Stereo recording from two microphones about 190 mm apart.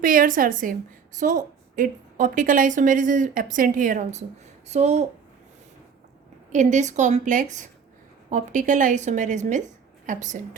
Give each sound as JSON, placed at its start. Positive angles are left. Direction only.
{"t": 0.0, "sound": "a woman's voice", "side_deg": -45}
{"t": 6.5, "sound": "a woman's voice", "side_deg": -40}